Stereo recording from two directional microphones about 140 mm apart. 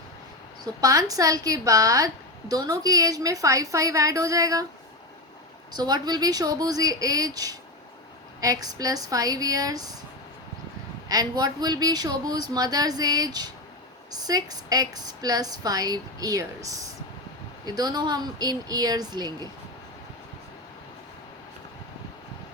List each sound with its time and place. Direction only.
0.6 s speech: 25° right (ahead or behind)
5.7 s speech: 30° right (ahead or behind)
11.1 s speech: 25° right (ahead or behind)